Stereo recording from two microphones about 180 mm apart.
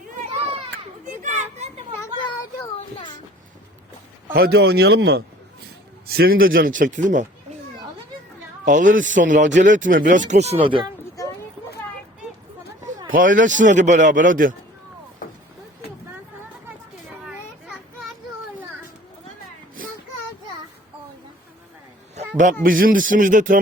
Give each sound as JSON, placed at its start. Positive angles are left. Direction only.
{"t": 1.2, "sound": "children playing", "side_deg": -40}
{"t": 4.3, "sound": "speech", "side_deg": -55}
{"t": 6.1, "sound": "speech", "side_deg": -60}
{"t": 8.6, "sound": "speech", "side_deg": -45}
{"t": 13.1, "sound": "speech", "side_deg": -50}
{"t": 17.2, "sound": "children playing", "side_deg": 0}
{"t": 22.6, "sound": "speech", "side_deg": -50}